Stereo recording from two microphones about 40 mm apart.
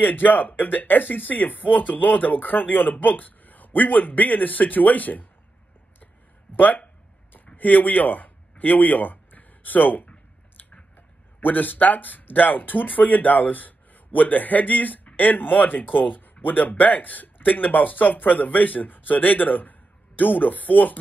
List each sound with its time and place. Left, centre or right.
0.0 s speech: left
6.5 s speech: left
11.4 s speech: left